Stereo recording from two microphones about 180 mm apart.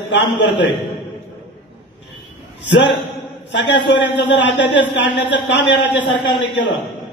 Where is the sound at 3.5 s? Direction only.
80° left.